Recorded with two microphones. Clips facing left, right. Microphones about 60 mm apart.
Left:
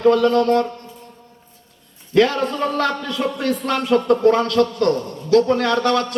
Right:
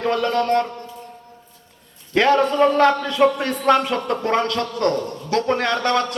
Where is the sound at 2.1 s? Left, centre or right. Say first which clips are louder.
Even; right.